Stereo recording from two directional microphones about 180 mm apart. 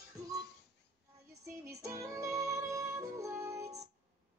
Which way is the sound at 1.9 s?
15° right (ahead or behind).